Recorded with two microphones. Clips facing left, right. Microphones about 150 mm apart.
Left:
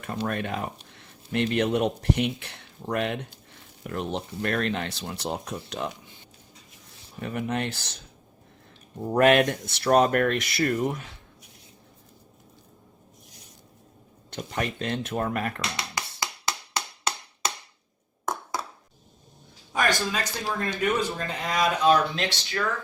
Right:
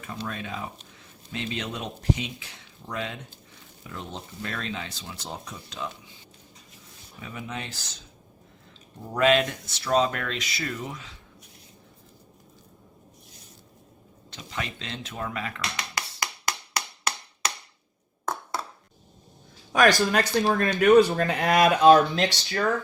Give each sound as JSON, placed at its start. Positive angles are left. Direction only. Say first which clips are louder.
{"t": 0.0, "sound": "speech", "louder": "left 5 dB", "side_deg": 60}
{"t": 7.2, "sound": "speech", "louder": "left 7 dB", "side_deg": 60}
{"t": 9.1, "sound": "speech", "louder": "left 3 dB", "side_deg": 55}
{"t": 14.3, "sound": "speech", "louder": "left 5 dB", "side_deg": 50}
{"t": 16.5, "sound": "a sound", "louder": "even", "side_deg": 25}
{"t": 19.7, "sound": "speech", "louder": "right 6 dB", "side_deg": -80}